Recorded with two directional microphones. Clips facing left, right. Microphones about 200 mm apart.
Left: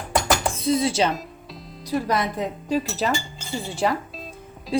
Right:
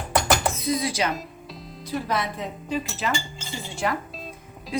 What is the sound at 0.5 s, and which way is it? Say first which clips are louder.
Speech: left 4 dB; 30° left (ahead or behind).